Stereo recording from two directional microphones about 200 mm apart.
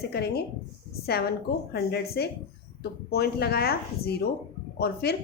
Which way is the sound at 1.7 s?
50° left (ahead or behind).